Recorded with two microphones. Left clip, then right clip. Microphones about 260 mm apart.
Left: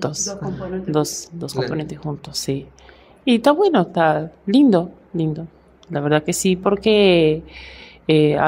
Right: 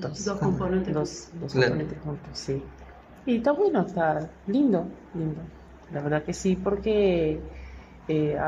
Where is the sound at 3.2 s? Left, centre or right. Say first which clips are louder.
Left 8 dB; left.